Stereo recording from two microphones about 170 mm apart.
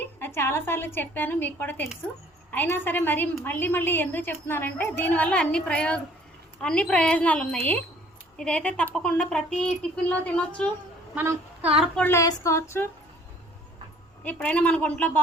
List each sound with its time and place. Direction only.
0.2 s a woman's voice: 15° left (ahead or behind)
11.1 s a woman's voice: 10° right (ahead or behind)
11.8 s a woman's voice: 10° left (ahead or behind)
14.3 s a woman's voice: 5° left (ahead or behind)